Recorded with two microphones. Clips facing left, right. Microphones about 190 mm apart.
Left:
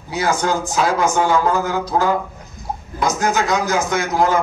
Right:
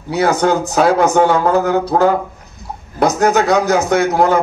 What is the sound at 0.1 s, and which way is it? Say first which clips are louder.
A man's voice: right 5 dB; 60° right (ahead or behind).